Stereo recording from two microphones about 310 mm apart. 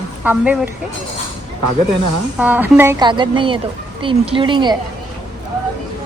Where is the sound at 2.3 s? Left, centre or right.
Centre.